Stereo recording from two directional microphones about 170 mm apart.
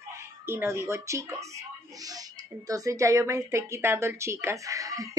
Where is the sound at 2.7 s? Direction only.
20° right (ahead or behind).